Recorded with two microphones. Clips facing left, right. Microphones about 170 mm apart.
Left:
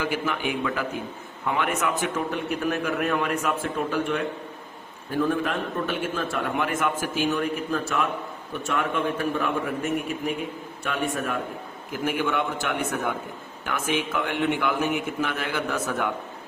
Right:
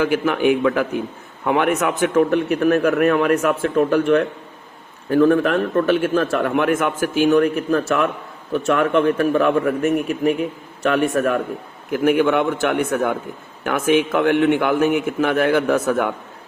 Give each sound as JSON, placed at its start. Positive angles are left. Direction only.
{"t": 0.0, "sound": "a man's voice", "side_deg": -60}